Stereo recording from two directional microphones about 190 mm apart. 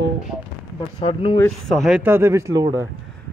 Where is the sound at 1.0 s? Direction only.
25° left (ahead or behind).